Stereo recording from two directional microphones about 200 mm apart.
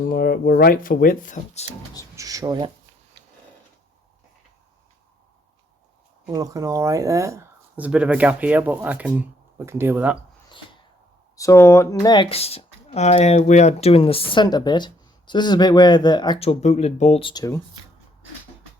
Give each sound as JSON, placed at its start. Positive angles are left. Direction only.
{"t": 0.0, "sound": "speech", "side_deg": 50}
{"t": 2.1, "sound": "speech", "side_deg": -15}
{"t": 6.3, "sound": "speech", "side_deg": -15}
{"t": 11.3, "sound": "speech", "side_deg": 15}